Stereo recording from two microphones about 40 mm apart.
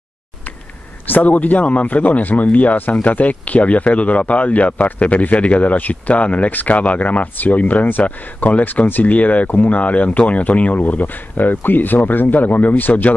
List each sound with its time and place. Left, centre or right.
1.0 s speech: left
6.5 s speech: left
6.8 s speech: left